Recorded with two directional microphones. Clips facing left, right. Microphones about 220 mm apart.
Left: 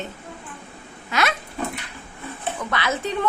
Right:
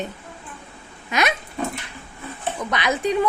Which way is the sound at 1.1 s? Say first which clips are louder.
Right 1 dB; 20° right (ahead or behind).